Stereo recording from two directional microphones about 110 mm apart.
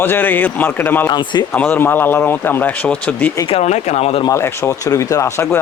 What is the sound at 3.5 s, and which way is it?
Speech, 85° left.